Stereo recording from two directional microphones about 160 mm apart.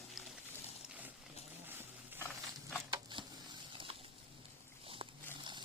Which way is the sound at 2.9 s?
30° right (ahead or behind).